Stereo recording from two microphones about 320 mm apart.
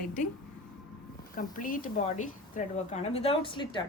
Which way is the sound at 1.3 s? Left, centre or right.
Left.